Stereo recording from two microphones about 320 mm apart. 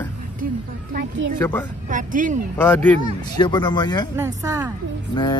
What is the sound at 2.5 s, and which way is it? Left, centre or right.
Speech, centre.